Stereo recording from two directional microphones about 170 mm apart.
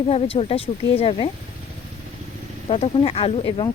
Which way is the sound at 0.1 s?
35° left (ahead or behind).